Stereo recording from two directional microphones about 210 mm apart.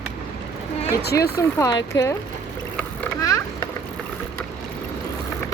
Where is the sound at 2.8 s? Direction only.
10° left (ahead or behind).